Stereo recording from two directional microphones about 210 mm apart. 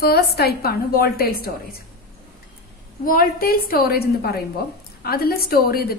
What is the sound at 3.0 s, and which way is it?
A woman's voice, 45° left (ahead or behind).